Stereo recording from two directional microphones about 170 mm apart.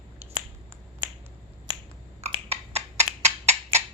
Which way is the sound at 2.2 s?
40° right (ahead or behind).